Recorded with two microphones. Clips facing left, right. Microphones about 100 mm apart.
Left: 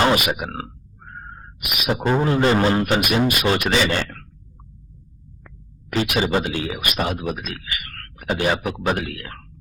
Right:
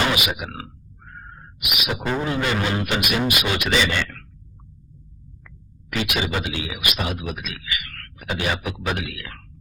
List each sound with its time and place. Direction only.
0.0 s a sound: 40° left (ahead or behind)
1.9 s speech: 30° left (ahead or behind)
5.9 s speech: 35° left (ahead or behind)